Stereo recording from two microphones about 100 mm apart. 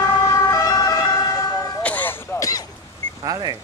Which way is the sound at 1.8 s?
15° left (ahead or behind).